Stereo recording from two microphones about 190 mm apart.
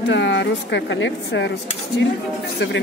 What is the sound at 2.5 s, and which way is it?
Speech, 65° left (ahead or behind).